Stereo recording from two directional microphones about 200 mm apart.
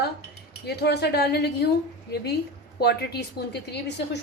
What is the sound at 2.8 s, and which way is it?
Speech, 55° left (ahead or behind).